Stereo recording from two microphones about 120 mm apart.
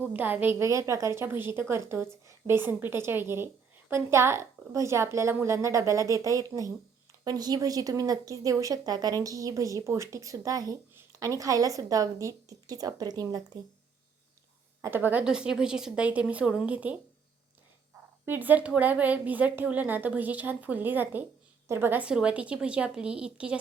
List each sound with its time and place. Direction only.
0.0 s a woman's voice: 15° right (ahead or behind); by 13.4 s 30° right (ahead or behind)
14.8 s a woman's voice: 20° right (ahead or behind)
18.3 s a woman's voice: 15° right (ahead or behind)